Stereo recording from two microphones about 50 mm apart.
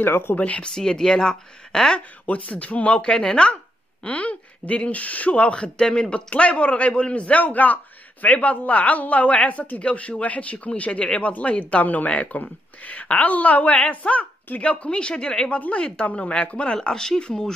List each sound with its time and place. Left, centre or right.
0.0 s speech: left
0.4 s speech: left
0.7 s speech: centre
2.2 s speech: left
4.0 s speech: left
16.7 s speech: centre